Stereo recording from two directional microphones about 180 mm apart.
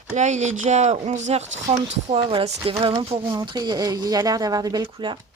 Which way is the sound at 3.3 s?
20° right (ahead or behind).